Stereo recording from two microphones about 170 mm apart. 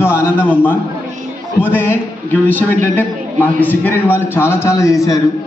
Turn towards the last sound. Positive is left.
turn(degrees=20)  # may be behind; listen again after turning